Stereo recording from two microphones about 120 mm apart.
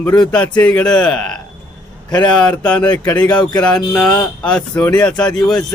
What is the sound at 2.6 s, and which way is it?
Mantra, 10° left (ahead or behind).